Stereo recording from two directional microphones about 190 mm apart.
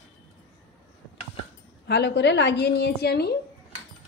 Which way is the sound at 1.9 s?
65° left (ahead or behind).